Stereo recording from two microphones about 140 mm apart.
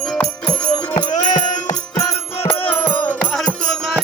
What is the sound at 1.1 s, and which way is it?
Music, 60° left (ahead or behind).